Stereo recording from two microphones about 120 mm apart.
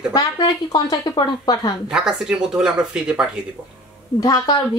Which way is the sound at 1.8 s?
5° right (ahead or behind).